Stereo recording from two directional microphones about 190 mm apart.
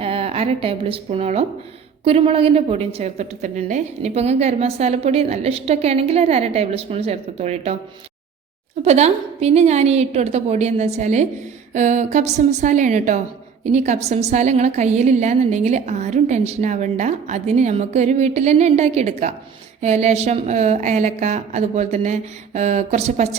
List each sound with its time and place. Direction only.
0.0 s a woman's voice: 30° right (ahead or behind)
8.8 s a woman's voice: 35° right (ahead or behind)